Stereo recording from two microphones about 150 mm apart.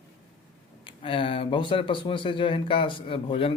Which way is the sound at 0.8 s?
35° left (ahead or behind).